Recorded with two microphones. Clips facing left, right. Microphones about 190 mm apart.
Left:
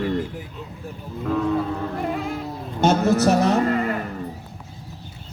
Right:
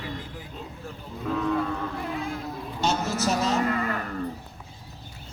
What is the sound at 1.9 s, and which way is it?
Music, 55° left (ahead or behind).